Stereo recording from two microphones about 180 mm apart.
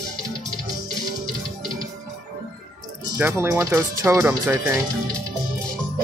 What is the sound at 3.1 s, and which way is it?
Speech, 15° right (ahead or behind).